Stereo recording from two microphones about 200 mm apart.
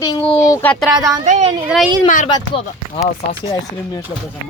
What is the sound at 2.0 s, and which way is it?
Speech, 40° left (ahead or behind).